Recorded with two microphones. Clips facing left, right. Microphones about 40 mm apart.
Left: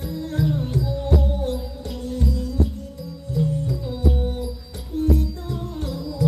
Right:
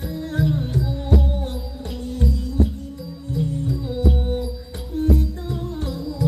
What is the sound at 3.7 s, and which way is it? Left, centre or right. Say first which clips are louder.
Music: right 2 dB; right.